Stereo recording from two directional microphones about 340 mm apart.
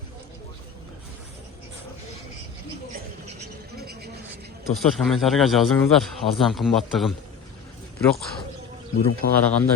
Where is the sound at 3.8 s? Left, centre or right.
Right.